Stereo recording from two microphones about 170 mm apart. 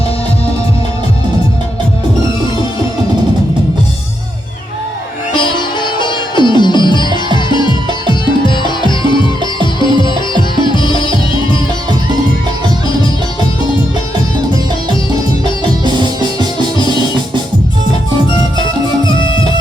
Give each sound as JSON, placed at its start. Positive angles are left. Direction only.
{"t": 5.3, "sound": "music", "side_deg": 30}
{"t": 15.8, "sound": "music", "side_deg": -25}